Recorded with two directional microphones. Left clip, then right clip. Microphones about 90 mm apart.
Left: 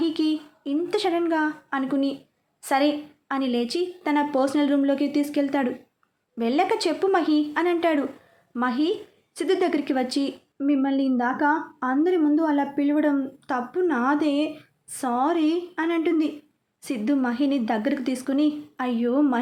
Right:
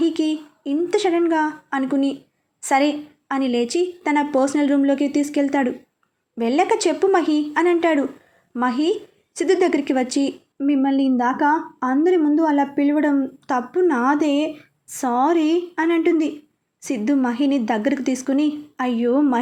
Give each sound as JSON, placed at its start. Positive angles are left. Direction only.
{"t": 0.0, "sound": "a woman's voice", "side_deg": -30}